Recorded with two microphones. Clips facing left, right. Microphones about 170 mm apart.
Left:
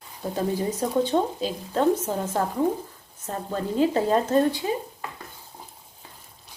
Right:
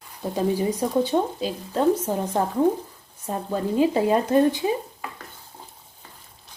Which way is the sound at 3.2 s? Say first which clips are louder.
Right 3 dB; 10° right (ahead or behind).